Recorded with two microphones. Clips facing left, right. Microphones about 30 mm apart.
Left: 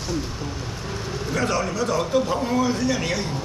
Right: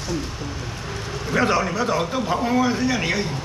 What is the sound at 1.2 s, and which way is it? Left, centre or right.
A man's voice, right.